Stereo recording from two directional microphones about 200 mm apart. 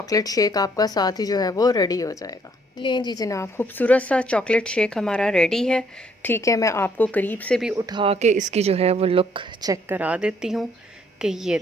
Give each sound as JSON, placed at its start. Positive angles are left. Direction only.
{"t": 0.0, "sound": "a woman's voice", "side_deg": 20}
{"t": 6.2, "sound": "speech", "side_deg": 15}
{"t": 7.6, "sound": "speech", "side_deg": -5}
{"t": 7.9, "sound": "a woman's voice", "side_deg": -25}